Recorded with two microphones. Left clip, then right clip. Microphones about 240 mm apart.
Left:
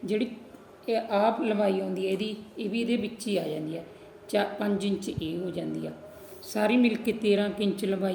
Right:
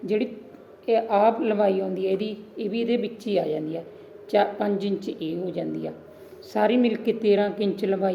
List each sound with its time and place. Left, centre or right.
0.0 s a woman's voice: centre